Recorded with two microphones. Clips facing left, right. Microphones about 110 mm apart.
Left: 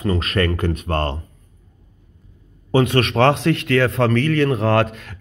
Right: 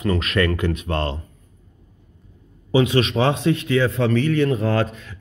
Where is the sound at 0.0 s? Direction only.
30° left (ahead or behind); by 1.1 s 50° left (ahead or behind).